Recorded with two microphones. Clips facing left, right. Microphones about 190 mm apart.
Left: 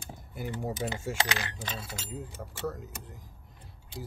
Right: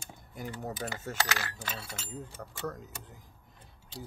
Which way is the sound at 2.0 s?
5° left (ahead or behind).